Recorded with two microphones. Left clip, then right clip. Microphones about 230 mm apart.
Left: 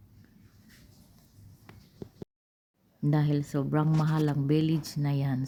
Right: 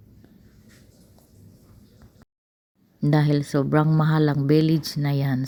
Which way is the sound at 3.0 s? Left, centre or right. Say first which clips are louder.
Right 7 dB; right.